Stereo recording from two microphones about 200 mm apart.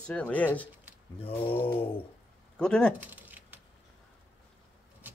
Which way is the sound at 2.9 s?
10° right (ahead or behind).